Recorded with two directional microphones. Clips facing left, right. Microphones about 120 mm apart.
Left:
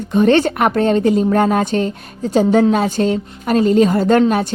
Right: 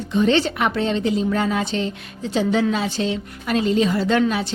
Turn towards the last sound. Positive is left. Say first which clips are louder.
# left 6 dB
turn(degrees=50)  # may be behind; listen again after turning